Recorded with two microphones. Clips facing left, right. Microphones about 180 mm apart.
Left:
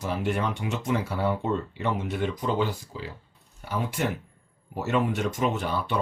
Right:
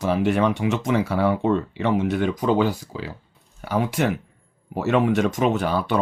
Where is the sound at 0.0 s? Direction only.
90° right.